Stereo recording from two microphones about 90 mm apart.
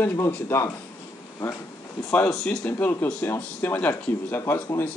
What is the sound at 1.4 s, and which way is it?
Speech, 25° left (ahead or behind).